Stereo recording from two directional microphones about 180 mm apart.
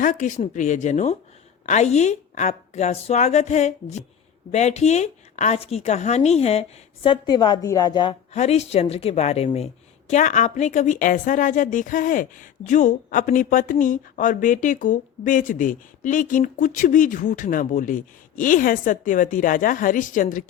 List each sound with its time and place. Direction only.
0.0 s a woman's voice: 45° left (ahead or behind); by 8.4 s 25° left (ahead or behind)
8.4 s a woman's voice: 35° left (ahead or behind)